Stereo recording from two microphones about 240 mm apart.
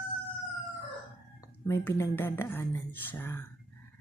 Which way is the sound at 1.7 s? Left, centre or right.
Centre.